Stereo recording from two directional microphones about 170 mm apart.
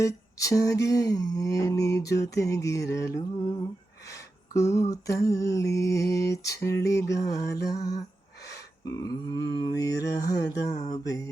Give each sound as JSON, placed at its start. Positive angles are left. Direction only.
{"t": 0.0, "sound": "a sound", "side_deg": 20}
{"t": 0.9, "sound": "mantra", "side_deg": 20}
{"t": 4.5, "sound": "mantra", "side_deg": 20}